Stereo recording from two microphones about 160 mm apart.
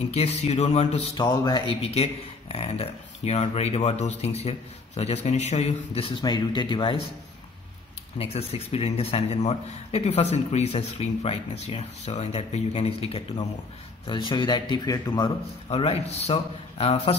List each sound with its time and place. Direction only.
0.1 s speech: 40° left (ahead or behind)
1.1 s a man's voice: 25° left (ahead or behind)
6.2 s a man's voice: 30° left (ahead or behind)
8.2 s a man's voice: 40° left (ahead or behind); by 15.3 s 25° left (ahead or behind)
15.7 s a man's voice: 40° left (ahead or behind)